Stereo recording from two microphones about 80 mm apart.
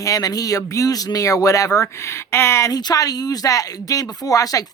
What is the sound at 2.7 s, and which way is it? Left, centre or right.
A man's voice, left.